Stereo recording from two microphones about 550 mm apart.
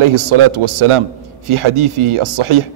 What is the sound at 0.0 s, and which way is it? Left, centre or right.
A man's voice, right.